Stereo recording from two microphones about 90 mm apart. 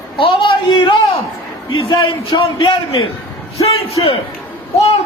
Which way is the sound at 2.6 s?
75° left (ahead or behind).